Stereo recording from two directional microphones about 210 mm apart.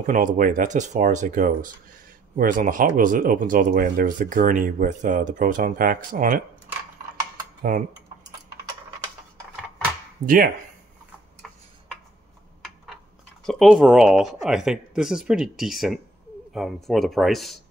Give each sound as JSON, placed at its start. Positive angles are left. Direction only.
{"t": 0.0, "sound": "speech", "side_deg": -40}
{"t": 7.7, "sound": "speech", "side_deg": -40}
{"t": 10.2, "sound": "speech", "side_deg": -40}
{"t": 13.5, "sound": "speech", "side_deg": 0}